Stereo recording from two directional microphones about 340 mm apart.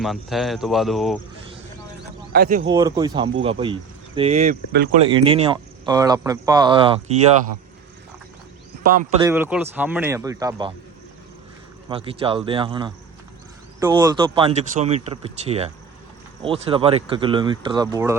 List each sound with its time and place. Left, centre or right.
0.0 s a man's voice: centre
2.3 s speech: right
2.6 s speech: centre; by 4.9 s right
5.0 s speech: centre
8.8 s a man's voice: right
9.2 s a man's voice: centre
11.9 s speech: centre